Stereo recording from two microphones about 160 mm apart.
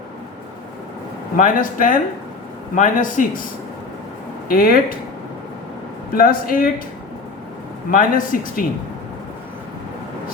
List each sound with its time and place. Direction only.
1.4 s speech: 55° left (ahead or behind)
4.4 s speech: 65° left (ahead or behind)
6.1 s speech: 60° left (ahead or behind)
7.9 s speech: 60° left (ahead or behind)